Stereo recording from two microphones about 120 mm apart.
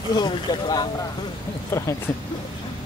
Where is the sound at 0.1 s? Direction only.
40° left (ahead or behind).